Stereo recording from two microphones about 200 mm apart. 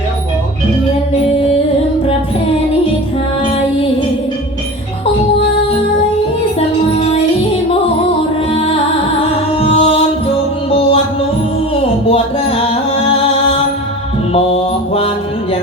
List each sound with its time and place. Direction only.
9.6 s music: 30° left (ahead or behind)
12.0 s music: 30° left (ahead or behind)
14.3 s mantra: 30° left (ahead or behind)